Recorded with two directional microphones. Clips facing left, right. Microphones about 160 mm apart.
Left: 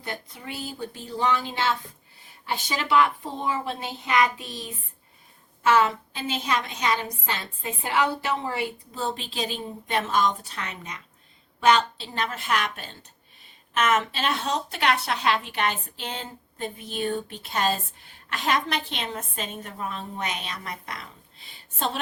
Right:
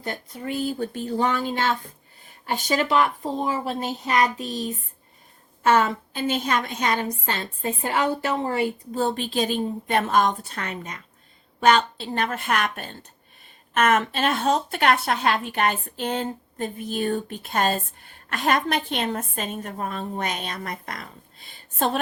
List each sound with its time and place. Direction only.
0.0 s a woman's voice: 45° right (ahead or behind)